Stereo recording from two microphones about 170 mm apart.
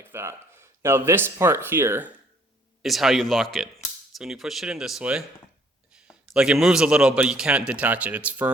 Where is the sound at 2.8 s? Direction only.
Centre (ahead or behind).